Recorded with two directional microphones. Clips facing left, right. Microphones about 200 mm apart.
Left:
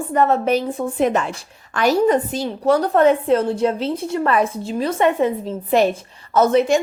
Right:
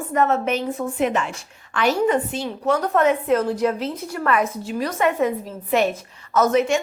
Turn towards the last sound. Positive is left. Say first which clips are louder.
# left 3 dB
turn(degrees=35)  # may be behind; listen again after turning